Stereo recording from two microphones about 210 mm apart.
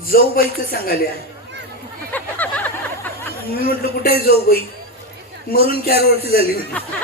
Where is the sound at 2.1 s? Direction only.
10° left (ahead or behind).